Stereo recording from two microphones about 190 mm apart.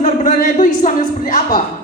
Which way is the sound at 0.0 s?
40° left (ahead or behind).